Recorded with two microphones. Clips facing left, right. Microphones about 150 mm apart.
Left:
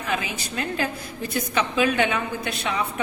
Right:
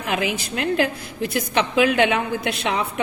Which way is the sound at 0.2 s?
85° right.